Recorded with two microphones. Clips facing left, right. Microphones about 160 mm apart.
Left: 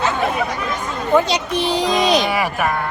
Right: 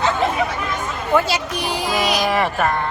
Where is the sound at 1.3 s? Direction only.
25° left (ahead or behind).